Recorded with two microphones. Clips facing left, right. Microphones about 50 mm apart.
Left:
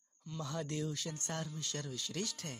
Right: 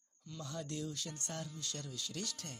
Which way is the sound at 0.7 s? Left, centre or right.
Left.